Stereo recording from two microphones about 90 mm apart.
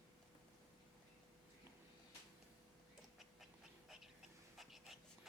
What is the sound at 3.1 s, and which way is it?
Dog, 5° right (ahead or behind).